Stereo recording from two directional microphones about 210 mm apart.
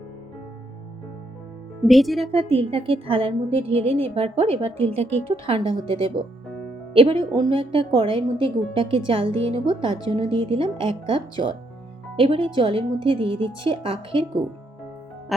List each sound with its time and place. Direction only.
1.8 s speech: centre (ahead or behind)
2.3 s a woman's voice: 25° right (ahead or behind)
6.9 s a woman's voice: 25° right (ahead or behind)
15.3 s speech: centre (ahead or behind)